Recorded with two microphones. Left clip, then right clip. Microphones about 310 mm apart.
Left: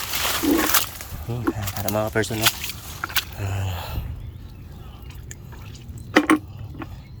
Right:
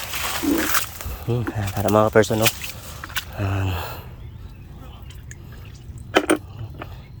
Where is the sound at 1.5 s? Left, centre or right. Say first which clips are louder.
Right 7 dB; right.